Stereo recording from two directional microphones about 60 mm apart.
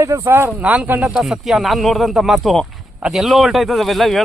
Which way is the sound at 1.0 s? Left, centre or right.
Centre.